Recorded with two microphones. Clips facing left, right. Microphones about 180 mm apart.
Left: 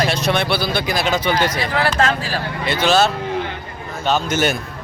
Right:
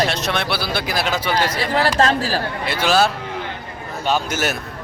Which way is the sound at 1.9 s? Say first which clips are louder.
Right 2 dB; 35° right (ahead or behind).